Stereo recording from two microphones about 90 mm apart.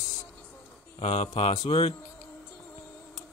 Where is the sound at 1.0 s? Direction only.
90° left.